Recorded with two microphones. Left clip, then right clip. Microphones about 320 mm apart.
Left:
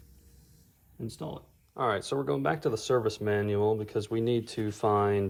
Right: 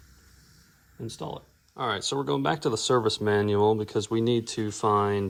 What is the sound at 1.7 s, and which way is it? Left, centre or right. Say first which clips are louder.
Speech: right 1 dB; centre.